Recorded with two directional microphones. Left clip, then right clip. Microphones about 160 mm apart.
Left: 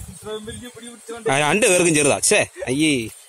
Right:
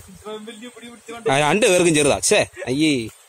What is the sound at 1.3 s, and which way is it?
Speech, 5° right (ahead or behind).